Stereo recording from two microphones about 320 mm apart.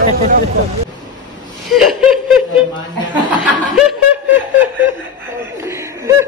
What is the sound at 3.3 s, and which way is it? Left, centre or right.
Speech, centre.